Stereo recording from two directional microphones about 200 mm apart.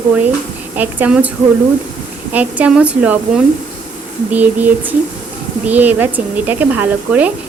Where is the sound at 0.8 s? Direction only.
10° right (ahead or behind).